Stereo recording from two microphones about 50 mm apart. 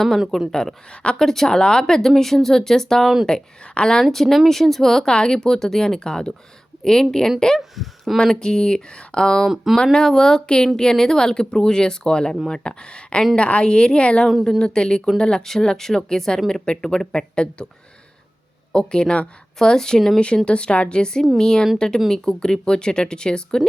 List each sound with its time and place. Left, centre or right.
0.3 s speech: centre
7.6 s speech: centre
8.2 s a woman's voice: centre
18.7 s a woman's voice: centre
19.5 s a woman's voice: centre